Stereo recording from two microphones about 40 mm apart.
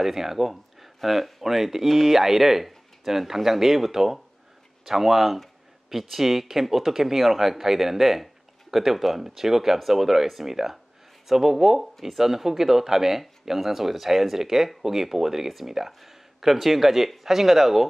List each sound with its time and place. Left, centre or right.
0.0 s speech: centre